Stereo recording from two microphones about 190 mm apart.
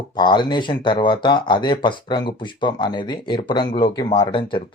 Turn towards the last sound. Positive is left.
turn(degrees=25)  # may be behind; listen again after turning